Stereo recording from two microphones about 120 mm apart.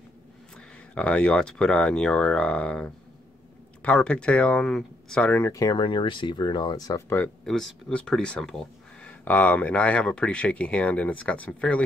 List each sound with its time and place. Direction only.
0.6 s speech: 10° left (ahead or behind)
5.5 s speech: 30° left (ahead or behind)
5.8 s speech: 45° left (ahead or behind)
7.4 s speech: 5° left (ahead or behind)